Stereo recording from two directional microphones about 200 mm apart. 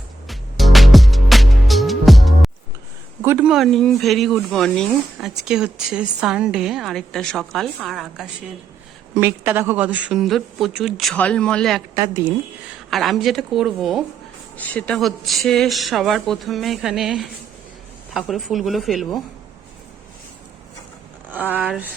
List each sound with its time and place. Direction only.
0.3 s music: centre (ahead or behind)
3.2 s speech: 10° right (ahead or behind)
11.9 s speech: 15° right (ahead or behind)
12.9 s speech: centre (ahead or behind)
21.3 s speech: 10° right (ahead or behind)